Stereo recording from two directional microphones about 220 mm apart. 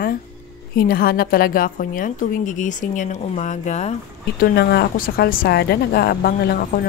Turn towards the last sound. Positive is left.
turn(degrees=45)  # may be behind; listen again after turning